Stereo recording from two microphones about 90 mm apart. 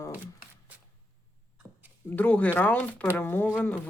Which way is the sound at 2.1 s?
20° left (ahead or behind).